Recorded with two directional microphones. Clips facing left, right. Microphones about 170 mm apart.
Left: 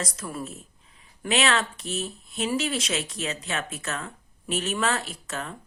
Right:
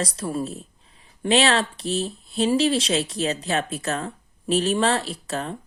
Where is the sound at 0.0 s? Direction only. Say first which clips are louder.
Right 7 dB; 30° right (ahead or behind).